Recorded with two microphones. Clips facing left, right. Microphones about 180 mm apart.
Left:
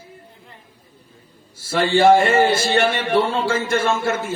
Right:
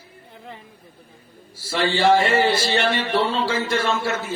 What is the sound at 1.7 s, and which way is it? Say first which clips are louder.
Speech: left 4 dB; 50° left (ahead or behind).